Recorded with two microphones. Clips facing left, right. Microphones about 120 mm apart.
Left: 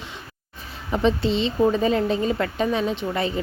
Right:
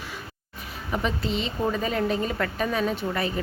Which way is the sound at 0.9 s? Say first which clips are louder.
Left 6 dB; 30° left (ahead or behind).